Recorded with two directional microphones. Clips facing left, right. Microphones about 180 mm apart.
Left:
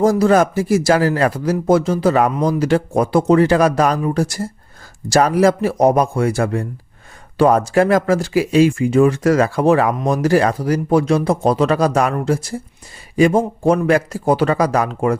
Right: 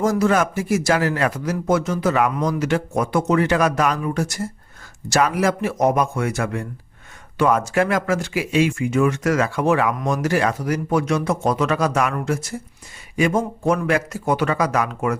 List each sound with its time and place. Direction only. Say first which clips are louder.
0.0 s speech: left 5 dB; 35° left (ahead or behind)